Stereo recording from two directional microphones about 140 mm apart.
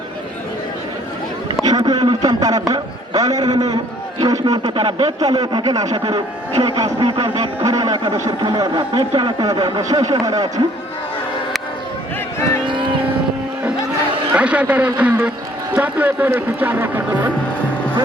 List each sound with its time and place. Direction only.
1.6 s a man's voice: 30° right (ahead or behind)
12.6 s vehicle: 35° right (ahead or behind)
14.3 s a man's voice: 10° right (ahead or behind)